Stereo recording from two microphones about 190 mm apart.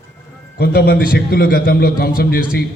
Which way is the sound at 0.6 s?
55° left (ahead or behind).